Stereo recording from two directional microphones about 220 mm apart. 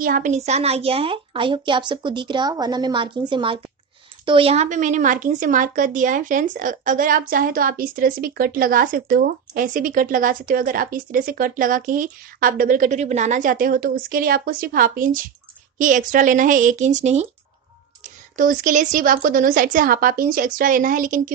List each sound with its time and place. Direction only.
0.0 s a woman's voice: 35° right (ahead or behind)
18.3 s a woman's voice: 40° right (ahead or behind)